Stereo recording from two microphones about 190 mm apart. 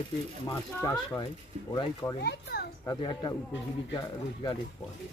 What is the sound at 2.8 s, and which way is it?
Speech, 25° left (ahead or behind).